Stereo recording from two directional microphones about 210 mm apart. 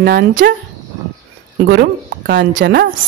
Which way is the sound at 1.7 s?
55° right (ahead or behind).